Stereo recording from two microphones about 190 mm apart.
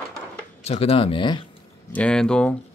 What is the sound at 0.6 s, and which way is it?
Speech, 30° left (ahead or behind).